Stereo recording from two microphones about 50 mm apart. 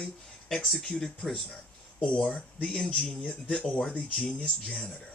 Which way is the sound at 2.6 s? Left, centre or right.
Centre.